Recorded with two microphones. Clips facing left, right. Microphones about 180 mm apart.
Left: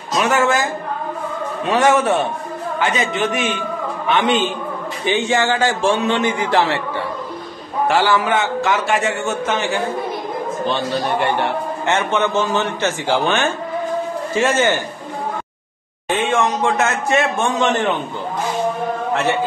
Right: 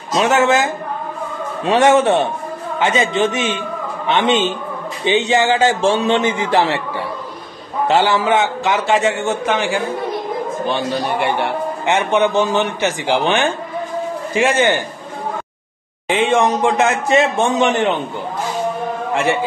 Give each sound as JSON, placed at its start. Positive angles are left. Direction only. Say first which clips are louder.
{"t": 0.1, "sound": "a man's voice", "louder": "right 3 dB", "side_deg": -25}
{"t": 7.9, "sound": "a man's voice", "louder": "right 2 dB", "side_deg": -20}
{"t": 10.7, "sound": "a man's voice", "louder": "even", "side_deg": -10}
{"t": 16.1, "sound": "a man's voice", "louder": "right 3 dB", "side_deg": -15}